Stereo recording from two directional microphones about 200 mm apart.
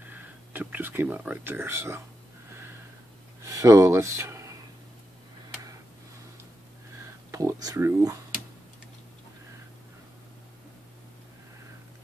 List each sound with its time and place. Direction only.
0.0 s speech: 10° right (ahead or behind)
3.4 s speech: 15° right (ahead or behind)
7.0 s speech: 15° right (ahead or behind)